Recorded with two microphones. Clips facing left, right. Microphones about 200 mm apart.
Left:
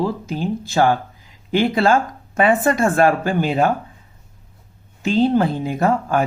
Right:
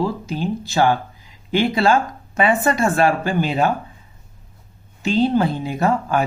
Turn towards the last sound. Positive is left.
turn(degrees=50)  # may be behind; listen again after turning